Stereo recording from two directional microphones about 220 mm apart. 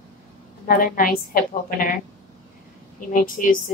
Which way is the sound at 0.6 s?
40° left (ahead or behind).